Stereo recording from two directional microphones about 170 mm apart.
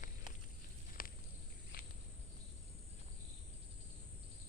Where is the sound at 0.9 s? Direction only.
55° left (ahead or behind).